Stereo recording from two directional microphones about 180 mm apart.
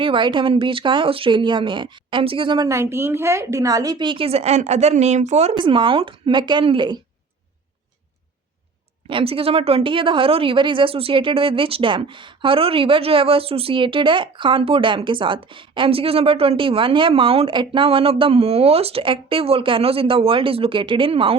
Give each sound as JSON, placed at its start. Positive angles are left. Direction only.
{"t": 0.0, "sound": "a woman's voice", "side_deg": -25}
{"t": 9.0, "sound": "a woman's voice", "side_deg": -30}